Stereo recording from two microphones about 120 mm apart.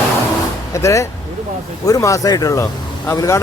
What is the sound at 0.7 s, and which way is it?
A man's voice, 25° left (ahead or behind).